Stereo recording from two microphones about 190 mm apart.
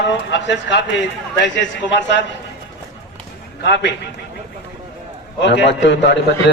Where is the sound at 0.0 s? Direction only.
65° left (ahead or behind).